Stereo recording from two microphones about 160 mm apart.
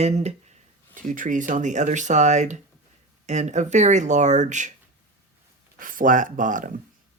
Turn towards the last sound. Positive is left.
turn(degrees=-55)  # may be behind; listen again after turning